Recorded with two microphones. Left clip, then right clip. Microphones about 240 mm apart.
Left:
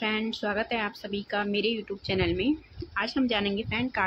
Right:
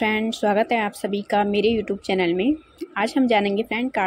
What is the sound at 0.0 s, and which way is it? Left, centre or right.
A woman's voice, centre.